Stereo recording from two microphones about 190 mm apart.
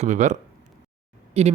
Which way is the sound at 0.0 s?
40° right (ahead or behind).